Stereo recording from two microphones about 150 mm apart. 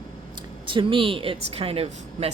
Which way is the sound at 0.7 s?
35° right (ahead or behind).